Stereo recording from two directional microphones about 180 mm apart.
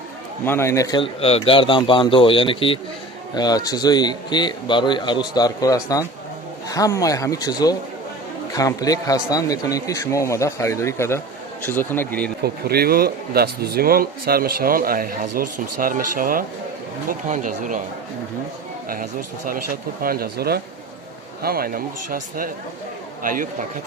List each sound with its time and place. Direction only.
0.4 s a man's voice: 15° left (ahead or behind)
12.4 s speech: 60° right (ahead or behind)
19.5 s speech: 50° right (ahead or behind)